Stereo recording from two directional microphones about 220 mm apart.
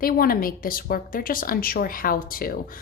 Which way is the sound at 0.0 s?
40° left (ahead or behind).